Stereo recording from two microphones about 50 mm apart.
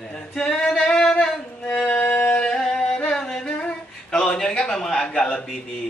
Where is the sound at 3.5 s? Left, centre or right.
Centre.